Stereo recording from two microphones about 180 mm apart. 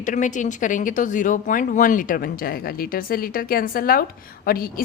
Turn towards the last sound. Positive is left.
turn(degrees=55)  # may be behind; listen again after turning